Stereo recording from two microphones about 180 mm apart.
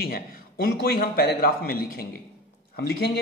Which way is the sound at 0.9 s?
55° left (ahead or behind).